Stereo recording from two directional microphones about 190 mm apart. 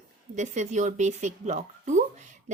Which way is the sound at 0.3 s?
40° right (ahead or behind).